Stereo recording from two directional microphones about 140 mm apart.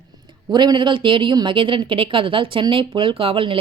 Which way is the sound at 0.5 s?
30° right (ahead or behind).